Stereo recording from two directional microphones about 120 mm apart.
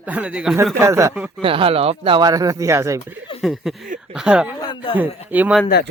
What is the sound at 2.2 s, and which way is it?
Speech, 30° right (ahead or behind).